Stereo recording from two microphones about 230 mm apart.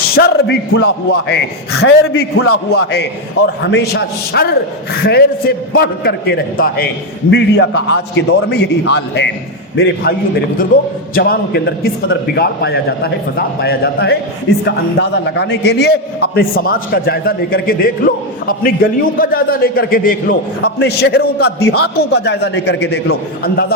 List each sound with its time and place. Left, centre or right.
0.2 s a man's voice: left